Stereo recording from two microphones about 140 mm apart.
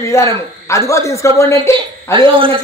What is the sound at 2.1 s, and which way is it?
Speech, 40° right (ahead or behind).